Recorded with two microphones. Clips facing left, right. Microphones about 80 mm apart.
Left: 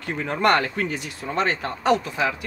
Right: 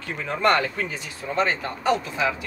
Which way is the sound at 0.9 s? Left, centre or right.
Left.